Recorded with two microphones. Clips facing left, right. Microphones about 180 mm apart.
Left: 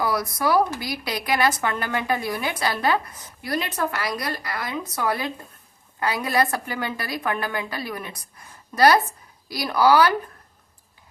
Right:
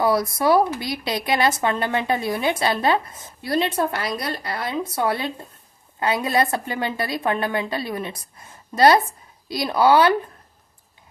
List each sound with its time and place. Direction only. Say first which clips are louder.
0.0 s speech: right 4 dB; 25° right (ahead or behind)